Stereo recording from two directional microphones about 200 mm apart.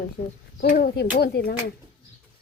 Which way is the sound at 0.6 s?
50° left (ahead or behind).